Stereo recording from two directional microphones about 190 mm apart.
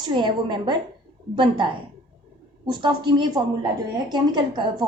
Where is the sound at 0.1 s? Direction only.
25° right (ahead or behind).